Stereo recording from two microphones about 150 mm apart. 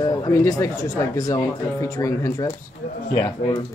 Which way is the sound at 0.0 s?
25° left (ahead or behind).